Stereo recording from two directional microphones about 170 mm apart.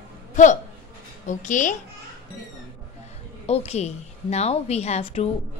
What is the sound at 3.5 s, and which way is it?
A woman's voice, 40° left (ahead or behind).